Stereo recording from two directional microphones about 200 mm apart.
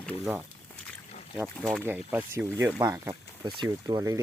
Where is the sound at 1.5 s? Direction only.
Centre (ahead or behind).